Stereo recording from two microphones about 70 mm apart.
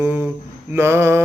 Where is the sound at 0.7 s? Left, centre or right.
Right.